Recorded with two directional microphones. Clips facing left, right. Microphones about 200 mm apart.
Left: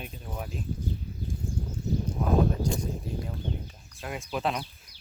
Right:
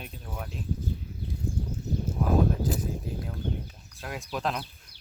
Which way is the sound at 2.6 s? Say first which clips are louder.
Even; 5° right (ahead or behind).